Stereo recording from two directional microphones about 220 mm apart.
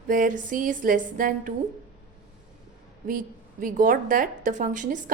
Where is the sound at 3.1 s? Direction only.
40° right (ahead or behind).